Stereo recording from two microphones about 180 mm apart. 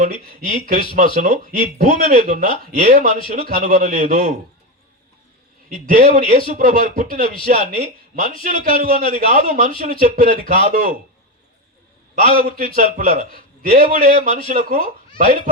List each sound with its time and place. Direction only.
0.0 s a man's voice: 50° right (ahead or behind)
5.6 s a man's voice: 50° right (ahead or behind)
12.1 s a man's voice: 50° right (ahead or behind)